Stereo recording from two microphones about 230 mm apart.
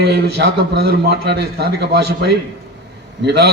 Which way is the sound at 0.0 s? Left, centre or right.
Right.